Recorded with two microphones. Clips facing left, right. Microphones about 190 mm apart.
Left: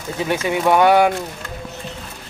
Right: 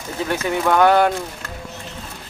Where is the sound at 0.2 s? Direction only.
15° left (ahead or behind).